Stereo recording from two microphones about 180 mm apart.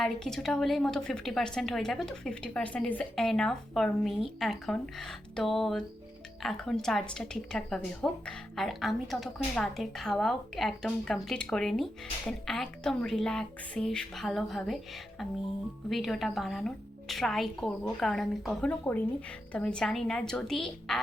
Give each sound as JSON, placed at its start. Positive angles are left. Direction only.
{"t": 0.0, "sound": "a woman's voice", "side_deg": 0}
{"t": 15.9, "sound": "a woman's voice", "side_deg": 0}